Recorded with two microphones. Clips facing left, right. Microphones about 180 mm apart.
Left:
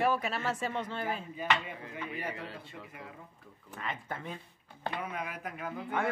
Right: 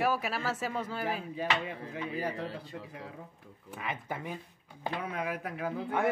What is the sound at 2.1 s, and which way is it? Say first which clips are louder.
Speech: right 5 dB; 35° right (ahead or behind).